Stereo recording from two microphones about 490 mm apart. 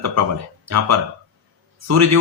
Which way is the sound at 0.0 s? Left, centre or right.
Right.